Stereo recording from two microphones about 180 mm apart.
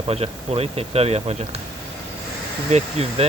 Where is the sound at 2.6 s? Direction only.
35° right (ahead or behind).